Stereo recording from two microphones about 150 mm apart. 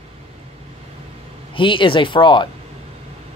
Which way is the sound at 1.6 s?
35° left (ahead or behind).